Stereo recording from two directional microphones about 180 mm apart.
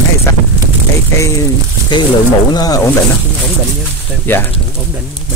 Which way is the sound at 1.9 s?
25° left (ahead or behind).